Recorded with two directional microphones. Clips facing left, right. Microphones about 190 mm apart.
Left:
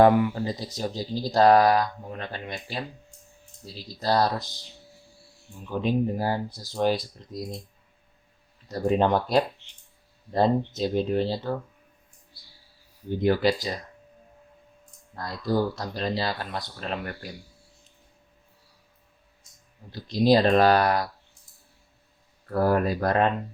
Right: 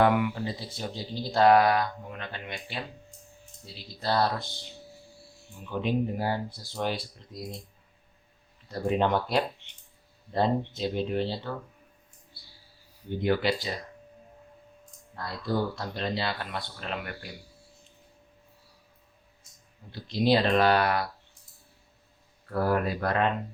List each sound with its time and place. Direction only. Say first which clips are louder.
0.0 s speech: left 5 dB; 35° left (ahead or behind)
5.8 s speech: left 3 dB; 40° left (ahead or behind)
8.6 s speech: left 3 dB; 40° left (ahead or behind)
10.7 s speech: left 4 dB; 40° left (ahead or behind)
13.1 s speech: left 4 dB; 40° left (ahead or behind)
15.2 s speech: left 4 dB; 40° left (ahead or behind)
19.9 s speech: left 4 dB; 40° left (ahead or behind)
22.6 s speech: left 4 dB; 40° left (ahead or behind)